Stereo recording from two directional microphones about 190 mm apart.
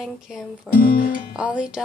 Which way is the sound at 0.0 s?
Centre (ahead or behind).